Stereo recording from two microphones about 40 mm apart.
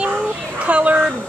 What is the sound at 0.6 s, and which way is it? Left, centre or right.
Speech, right.